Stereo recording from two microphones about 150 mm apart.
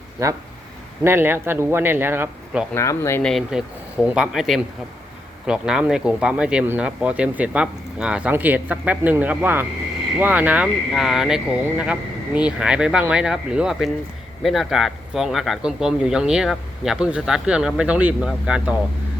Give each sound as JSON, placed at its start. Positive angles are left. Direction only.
{"t": 1.0, "sound": "speech", "side_deg": -15}
{"t": 2.7, "sound": "speech", "side_deg": 20}
{"t": 3.2, "sound": "speech", "side_deg": 0}